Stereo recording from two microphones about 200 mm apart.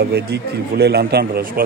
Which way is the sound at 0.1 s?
55° right (ahead or behind).